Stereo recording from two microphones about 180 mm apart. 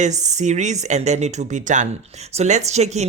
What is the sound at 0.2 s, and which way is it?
Speech, 40° right (ahead or behind).